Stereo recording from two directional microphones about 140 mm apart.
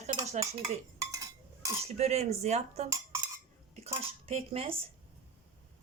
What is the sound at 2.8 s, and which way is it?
Dishes, 20° right (ahead or behind).